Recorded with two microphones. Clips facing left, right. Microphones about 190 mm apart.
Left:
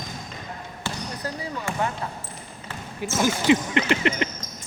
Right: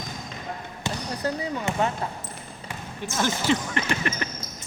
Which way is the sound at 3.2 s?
10° left (ahead or behind).